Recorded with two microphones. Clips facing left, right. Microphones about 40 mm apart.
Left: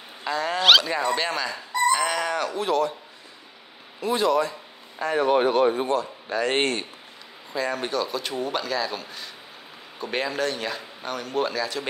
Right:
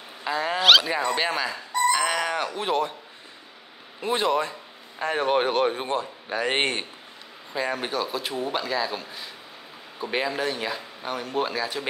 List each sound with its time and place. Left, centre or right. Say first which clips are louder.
0.2 s dog: even; centre
1.1 s speech: even; centre; by 2.9 s right
4.0 s speech: left 2 dB; right
5.8 s speech: left 3 dB; right
6.2 s speech: even; centre